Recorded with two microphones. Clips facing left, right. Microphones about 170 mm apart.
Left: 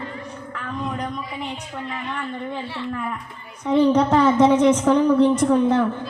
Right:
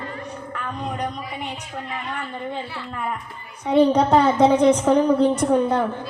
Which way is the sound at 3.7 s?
65° right (ahead or behind).